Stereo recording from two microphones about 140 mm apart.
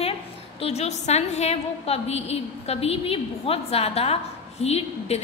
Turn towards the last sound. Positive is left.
turn(degrees=45)  # may be behind; listen again after turning